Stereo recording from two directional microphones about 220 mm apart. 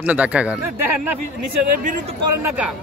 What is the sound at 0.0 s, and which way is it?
Speech, 5° right (ahead or behind).